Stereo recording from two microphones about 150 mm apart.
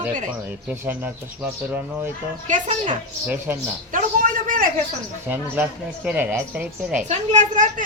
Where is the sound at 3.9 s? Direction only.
60° right (ahead or behind).